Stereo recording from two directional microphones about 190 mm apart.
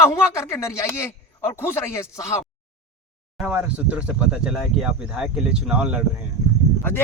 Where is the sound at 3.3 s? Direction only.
5° right (ahead or behind).